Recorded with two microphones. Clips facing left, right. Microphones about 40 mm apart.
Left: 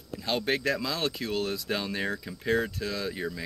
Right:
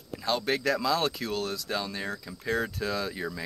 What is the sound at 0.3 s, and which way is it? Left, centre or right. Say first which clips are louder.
Speech: right 1 dB; centre.